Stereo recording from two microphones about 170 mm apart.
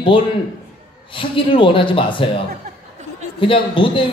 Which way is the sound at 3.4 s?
30° left (ahead or behind).